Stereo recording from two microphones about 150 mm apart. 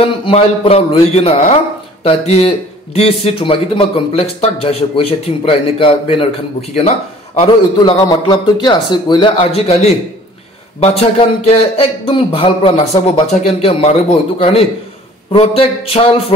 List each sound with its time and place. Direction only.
0.2 s a man's voice: 40° left (ahead or behind)
15.3 s a man's voice: 40° left (ahead or behind)